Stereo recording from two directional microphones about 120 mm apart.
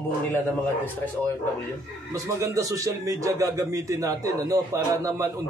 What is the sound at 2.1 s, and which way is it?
A man's voice, 25° right (ahead or behind).